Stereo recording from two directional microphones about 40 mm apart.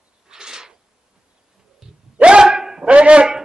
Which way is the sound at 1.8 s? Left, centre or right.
Centre.